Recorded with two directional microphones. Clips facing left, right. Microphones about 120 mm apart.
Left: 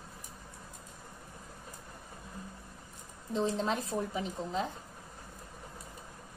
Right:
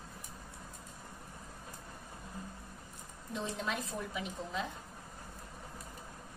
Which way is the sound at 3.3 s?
35° left (ahead or behind).